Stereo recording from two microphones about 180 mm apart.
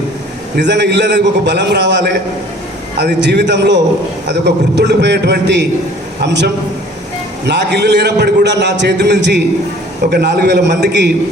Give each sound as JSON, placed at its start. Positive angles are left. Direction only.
{"t": 0.5, "sound": "a man's voice", "side_deg": -75}